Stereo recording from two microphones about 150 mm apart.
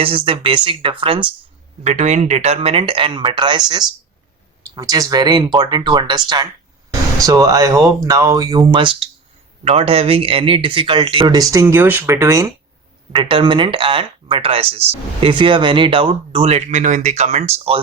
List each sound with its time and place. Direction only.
0.0 s speech: 35° right (ahead or behind)
1.8 s speech: 50° right (ahead or behind); by 3.6 s 30° right (ahead or behind)
4.7 s speech: 25° right (ahead or behind)
13.1 s speech: 35° right (ahead or behind)